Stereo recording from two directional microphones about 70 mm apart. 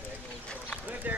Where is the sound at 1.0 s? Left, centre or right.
Right.